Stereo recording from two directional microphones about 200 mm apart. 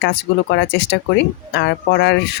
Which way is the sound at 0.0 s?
60° left (ahead or behind).